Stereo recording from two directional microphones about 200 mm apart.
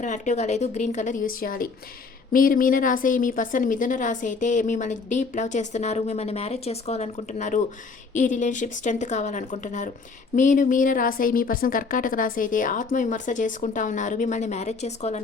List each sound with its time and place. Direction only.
0.0 s a woman's voice: 35° left (ahead or behind)